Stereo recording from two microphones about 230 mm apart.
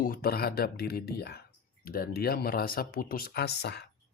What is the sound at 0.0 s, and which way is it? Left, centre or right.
Speech, left.